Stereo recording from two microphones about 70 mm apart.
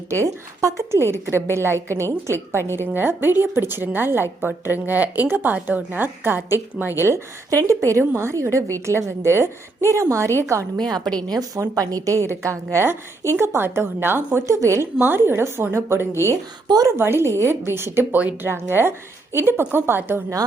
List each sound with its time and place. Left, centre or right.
0.1 s a woman's voice: right
2.6 s a woman's voice: left
2.8 s a woman's voice: right
7.5 s a woman's voice: right
11.0 s a woman's voice: centre
11.3 s a woman's voice: right
14.3 s a woman's voice: right
15.0 s a woman's voice: right
16.6 s speech: right
17.0 s a woman's voice: right